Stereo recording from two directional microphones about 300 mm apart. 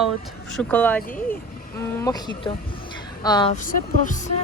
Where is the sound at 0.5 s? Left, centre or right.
Centre.